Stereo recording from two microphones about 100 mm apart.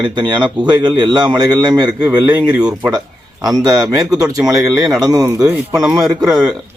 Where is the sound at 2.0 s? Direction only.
15° right (ahead or behind).